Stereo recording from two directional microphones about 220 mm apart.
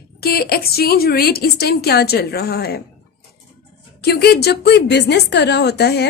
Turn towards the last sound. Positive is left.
turn(degrees=50)  # may be behind; listen again after turning